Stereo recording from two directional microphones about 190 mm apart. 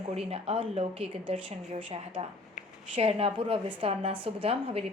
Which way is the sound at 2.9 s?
30° right (ahead or behind).